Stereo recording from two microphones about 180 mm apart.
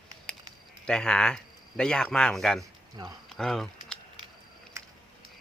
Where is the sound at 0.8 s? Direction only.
5° left (ahead or behind).